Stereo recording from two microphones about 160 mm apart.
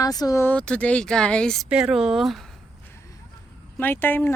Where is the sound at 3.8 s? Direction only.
15° left (ahead or behind).